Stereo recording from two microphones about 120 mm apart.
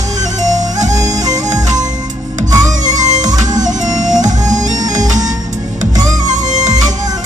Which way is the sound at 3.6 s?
90° right.